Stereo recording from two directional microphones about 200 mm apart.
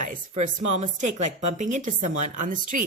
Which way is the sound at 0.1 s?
40° right (ahead or behind).